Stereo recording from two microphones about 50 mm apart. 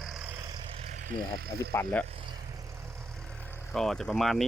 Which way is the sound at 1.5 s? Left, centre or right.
Left.